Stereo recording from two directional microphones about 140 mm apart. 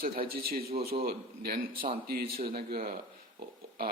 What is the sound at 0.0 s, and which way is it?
Speech, 90° right.